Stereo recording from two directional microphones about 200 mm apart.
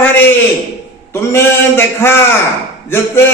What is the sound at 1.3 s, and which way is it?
A man's voice, 10° left (ahead or behind).